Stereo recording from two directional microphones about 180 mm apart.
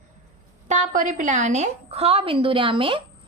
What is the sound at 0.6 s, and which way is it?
A woman's voice, 45° right (ahead or behind).